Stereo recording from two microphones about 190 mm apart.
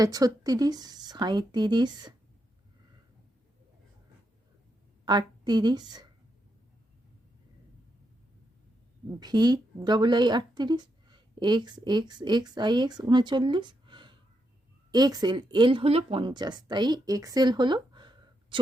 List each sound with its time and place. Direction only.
0.0 s speech: 20° right (ahead or behind)
5.0 s a woman's voice: 25° right (ahead or behind)
9.0 s speech: 20° right (ahead or behind)